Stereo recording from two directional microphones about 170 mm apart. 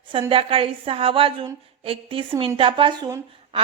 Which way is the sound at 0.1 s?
30° right (ahead or behind).